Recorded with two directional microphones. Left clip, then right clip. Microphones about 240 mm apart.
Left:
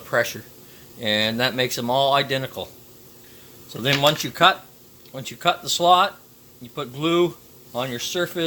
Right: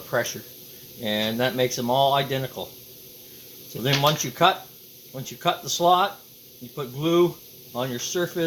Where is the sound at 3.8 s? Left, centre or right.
Left.